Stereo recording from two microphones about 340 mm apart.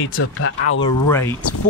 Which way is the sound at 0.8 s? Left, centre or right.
Centre.